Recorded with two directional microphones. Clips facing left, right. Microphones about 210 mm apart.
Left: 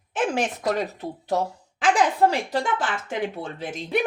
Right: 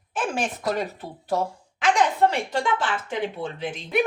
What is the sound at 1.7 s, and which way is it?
A woman's voice, 30° left (ahead or behind).